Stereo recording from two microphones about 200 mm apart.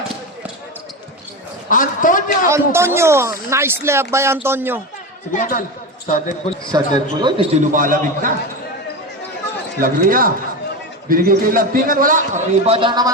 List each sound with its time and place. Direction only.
1.7 s a man's voice: 40° left (ahead or behind)
2.5 s speech: 15° right (ahead or behind)
5.3 s a man's voice: 45° left (ahead or behind)
6.7 s a man's voice: 20° right (ahead or behind)
7.7 s a man's voice: 40° right (ahead or behind)
9.8 s a man's voice: 45° right (ahead or behind); by 13.1 s 25° right (ahead or behind)